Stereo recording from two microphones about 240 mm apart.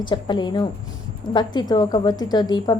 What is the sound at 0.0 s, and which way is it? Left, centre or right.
A woman's voice, centre.